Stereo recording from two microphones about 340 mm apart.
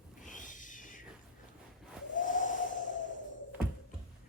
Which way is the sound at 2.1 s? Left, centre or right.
Left.